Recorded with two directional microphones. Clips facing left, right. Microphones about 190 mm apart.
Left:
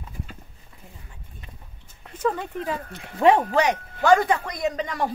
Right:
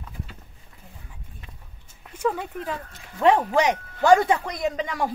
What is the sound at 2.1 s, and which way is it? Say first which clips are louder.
Speech: even; 10° right (ahead or behind).